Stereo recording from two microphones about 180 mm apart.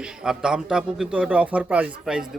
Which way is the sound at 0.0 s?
5° right (ahead or behind).